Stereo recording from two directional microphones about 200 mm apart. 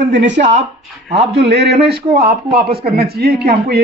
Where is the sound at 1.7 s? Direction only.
30° right (ahead or behind).